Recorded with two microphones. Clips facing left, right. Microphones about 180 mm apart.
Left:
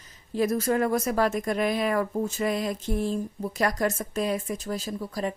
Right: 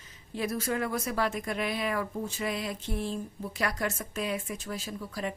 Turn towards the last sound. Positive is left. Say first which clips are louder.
# left 5 dB
turn(degrees=40)  # may be behind; listen again after turning